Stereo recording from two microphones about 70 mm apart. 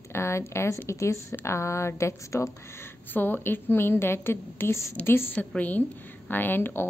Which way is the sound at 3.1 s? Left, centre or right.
Left.